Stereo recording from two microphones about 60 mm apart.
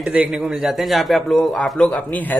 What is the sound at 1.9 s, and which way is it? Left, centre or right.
Speech, left.